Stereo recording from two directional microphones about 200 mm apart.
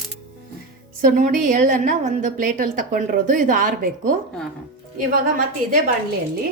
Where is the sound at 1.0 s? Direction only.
40° right (ahead or behind).